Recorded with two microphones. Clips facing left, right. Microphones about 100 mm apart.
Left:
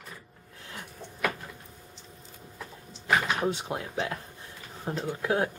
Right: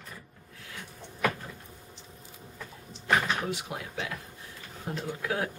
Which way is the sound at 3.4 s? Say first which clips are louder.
Left 4 dB; 25° left (ahead or behind).